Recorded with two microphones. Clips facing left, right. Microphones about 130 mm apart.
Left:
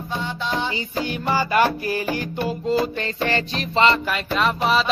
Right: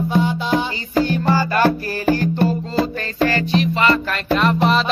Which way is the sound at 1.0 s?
15° left (ahead or behind).